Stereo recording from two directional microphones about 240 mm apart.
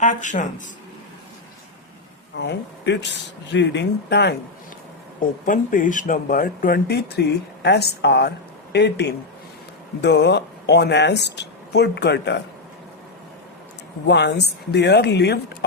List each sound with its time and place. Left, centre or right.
0.0 s speech: left
2.4 s speech: left
5.5 s speech: left
14.1 s speech: left